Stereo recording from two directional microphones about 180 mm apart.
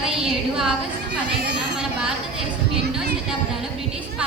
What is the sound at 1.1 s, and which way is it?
Speech, 70° right (ahead or behind).